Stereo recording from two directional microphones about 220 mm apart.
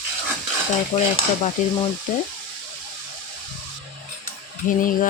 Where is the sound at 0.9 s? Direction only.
15° left (ahead or behind).